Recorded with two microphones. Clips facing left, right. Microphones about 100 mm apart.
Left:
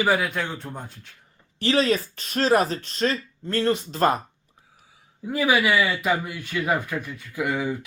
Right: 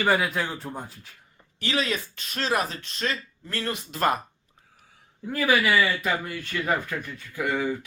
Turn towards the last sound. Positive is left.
turn(degrees=15)  # may be behind; listen again after turning